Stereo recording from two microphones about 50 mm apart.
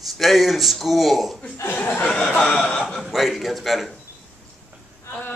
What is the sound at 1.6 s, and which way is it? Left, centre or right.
Speech, left.